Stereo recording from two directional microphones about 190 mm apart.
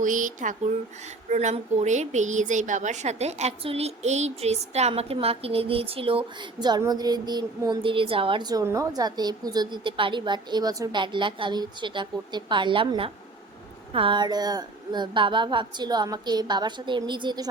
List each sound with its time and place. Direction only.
0.0 s a woman's voice: 45° right (ahead or behind); by 17.5 s 20° right (ahead or behind)